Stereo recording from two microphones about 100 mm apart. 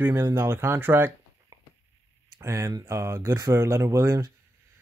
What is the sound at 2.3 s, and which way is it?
Speech, 30° right (ahead or behind).